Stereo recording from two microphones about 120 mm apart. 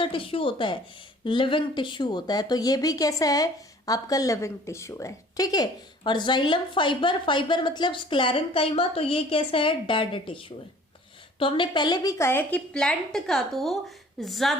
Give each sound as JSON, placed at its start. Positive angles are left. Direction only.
{"t": 0.0, "sound": "a woman's voice", "side_deg": 45}